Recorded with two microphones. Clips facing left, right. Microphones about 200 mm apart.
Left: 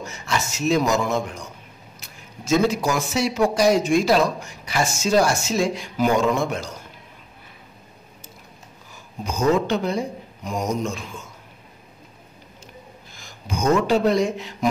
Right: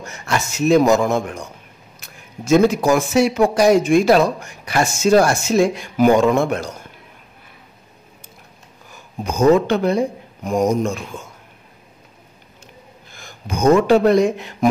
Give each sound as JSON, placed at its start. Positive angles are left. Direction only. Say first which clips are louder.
{"t": 0.0, "sound": "speech", "louder": "right 3 dB", "side_deg": -55}
{"t": 9.2, "sound": "speech", "louder": "right 6 dB", "side_deg": -60}
{"t": 13.1, "sound": "speech", "louder": "right 3 dB", "side_deg": -55}